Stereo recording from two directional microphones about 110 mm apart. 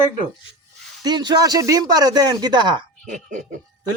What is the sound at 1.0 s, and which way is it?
Speech, 40° right (ahead or behind).